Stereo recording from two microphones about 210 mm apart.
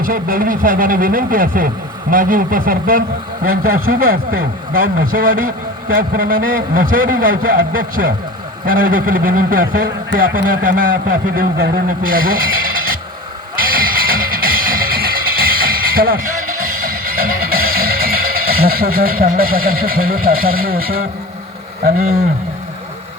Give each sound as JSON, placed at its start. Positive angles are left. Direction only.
{"t": 0.0, "sound": "a man's voice", "side_deg": -40}
{"t": 13.6, "sound": "music", "side_deg": -45}